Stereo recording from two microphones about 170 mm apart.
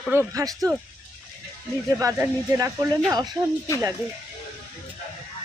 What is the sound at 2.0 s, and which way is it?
Speech, 20° right (ahead or behind).